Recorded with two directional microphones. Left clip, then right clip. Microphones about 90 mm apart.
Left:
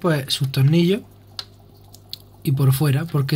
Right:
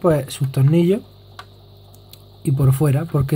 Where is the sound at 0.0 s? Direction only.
30° right (ahead or behind).